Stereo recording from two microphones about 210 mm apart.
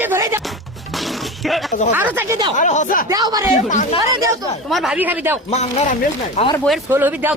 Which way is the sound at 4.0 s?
15° right (ahead or behind).